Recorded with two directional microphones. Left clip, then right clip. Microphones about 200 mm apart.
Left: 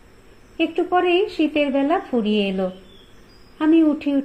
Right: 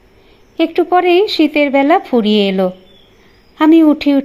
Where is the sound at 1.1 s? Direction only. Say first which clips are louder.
Right 8 dB; 80° right.